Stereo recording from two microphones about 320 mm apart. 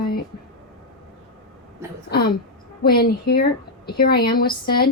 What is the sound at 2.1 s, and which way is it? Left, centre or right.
Speech, left.